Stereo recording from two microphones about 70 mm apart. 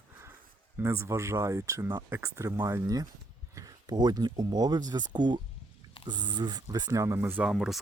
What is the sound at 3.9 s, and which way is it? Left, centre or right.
Speech, right.